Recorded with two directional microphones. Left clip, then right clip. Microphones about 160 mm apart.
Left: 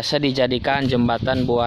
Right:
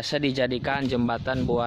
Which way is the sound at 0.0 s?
5° left (ahead or behind).